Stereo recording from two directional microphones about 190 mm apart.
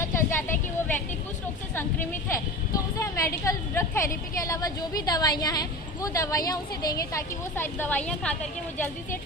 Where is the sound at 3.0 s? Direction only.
15° left (ahead or behind).